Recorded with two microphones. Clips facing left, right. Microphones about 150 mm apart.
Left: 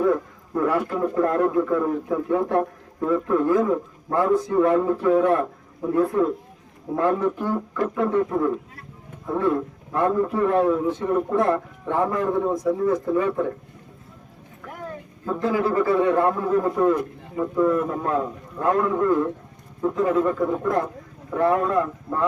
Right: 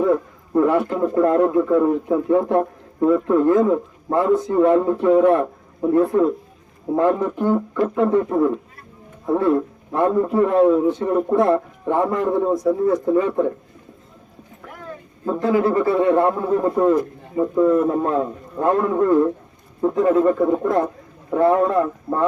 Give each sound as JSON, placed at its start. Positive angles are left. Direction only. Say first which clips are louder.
{"t": 0.0, "sound": "a man's voice", "louder": "right 3 dB", "side_deg": -25}
{"t": 12.5, "sound": "a man's voice", "louder": "right 3 dB", "side_deg": -25}
{"t": 15.2, "sound": "a man's voice", "louder": "right 4 dB", "side_deg": -25}